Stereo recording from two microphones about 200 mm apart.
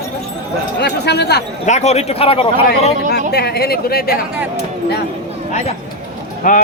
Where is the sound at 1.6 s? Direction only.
35° left (ahead or behind).